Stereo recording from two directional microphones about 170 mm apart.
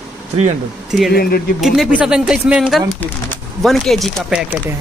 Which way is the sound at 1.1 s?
65° left (ahead or behind).